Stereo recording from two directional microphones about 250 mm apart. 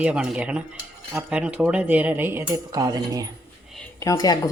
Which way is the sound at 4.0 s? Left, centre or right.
Centre.